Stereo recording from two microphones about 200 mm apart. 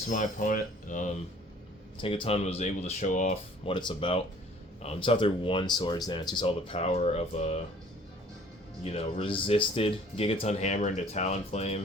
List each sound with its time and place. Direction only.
0.1 s speech: 40° left (ahead or behind)
2.0 s speech: 25° left (ahead or behind)
3.7 s speech: 25° left (ahead or behind)
8.8 s speech: 30° left (ahead or behind)